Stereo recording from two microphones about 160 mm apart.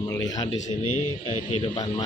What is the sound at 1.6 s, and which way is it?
Speech, 25° left (ahead or behind).